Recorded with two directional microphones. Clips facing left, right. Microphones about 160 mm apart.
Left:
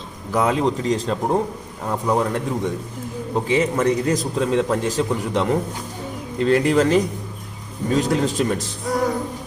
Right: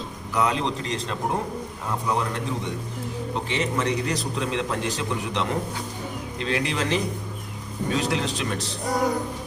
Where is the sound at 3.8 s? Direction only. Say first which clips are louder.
Left 6 dB; 50° left (ahead or behind).